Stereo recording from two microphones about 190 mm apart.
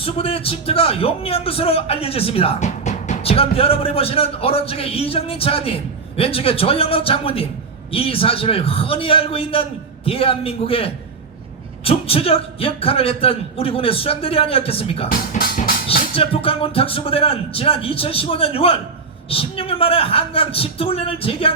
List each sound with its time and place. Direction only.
0.0 s a man's voice: 30° left (ahead or behind)
15.1 s speech: 50° left (ahead or behind)
15.9 s a man's voice: 30° left (ahead or behind)